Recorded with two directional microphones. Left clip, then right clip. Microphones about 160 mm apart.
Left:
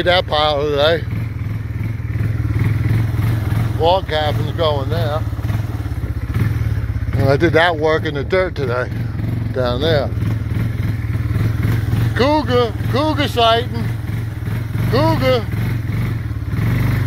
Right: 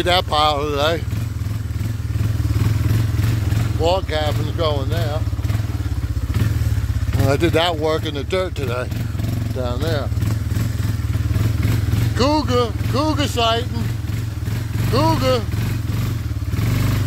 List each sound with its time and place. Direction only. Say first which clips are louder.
0.0 s speech: left 2 dB; 25° right (ahead or behind)
3.8 s speech: left 4 dB; 20° right (ahead or behind)
7.2 s speech: left 4 dB; 20° right (ahead or behind)
9.6 s speech: left 8 dB; 5° left (ahead or behind)
12.2 s speech: left 3 dB; 15° right (ahead or behind)
14.9 s speech: left 2 dB; 15° right (ahead or behind)